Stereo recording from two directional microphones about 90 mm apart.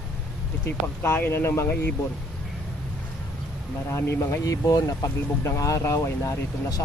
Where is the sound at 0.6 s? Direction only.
25° left (ahead or behind).